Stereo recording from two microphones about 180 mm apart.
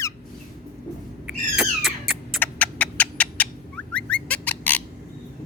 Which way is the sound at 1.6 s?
Centre (ahead or behind).